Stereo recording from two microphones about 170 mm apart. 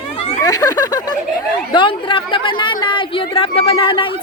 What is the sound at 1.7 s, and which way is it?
A woman's voice, 30° left (ahead or behind).